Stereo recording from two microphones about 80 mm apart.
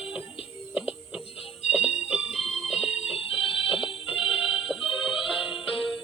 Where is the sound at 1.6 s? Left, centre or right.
Centre.